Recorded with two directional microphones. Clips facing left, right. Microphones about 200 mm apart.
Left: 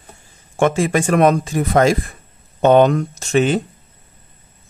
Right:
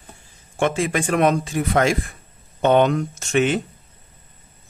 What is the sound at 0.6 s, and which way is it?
Speech, 45° left (ahead or behind).